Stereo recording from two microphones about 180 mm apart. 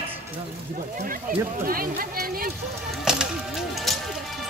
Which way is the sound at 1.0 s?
50° right (ahead or behind).